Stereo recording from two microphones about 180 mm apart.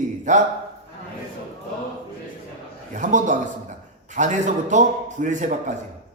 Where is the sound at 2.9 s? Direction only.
45° right (ahead or behind).